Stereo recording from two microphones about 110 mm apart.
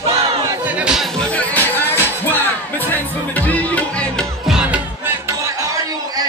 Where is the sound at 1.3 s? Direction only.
15° left (ahead or behind).